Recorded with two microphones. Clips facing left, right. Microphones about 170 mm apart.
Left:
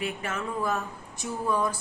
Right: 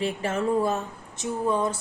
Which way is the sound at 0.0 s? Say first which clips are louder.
Right 6 dB; 30° right (ahead or behind).